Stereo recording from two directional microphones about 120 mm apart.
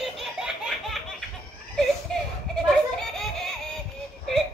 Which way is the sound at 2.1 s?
5° left (ahead or behind).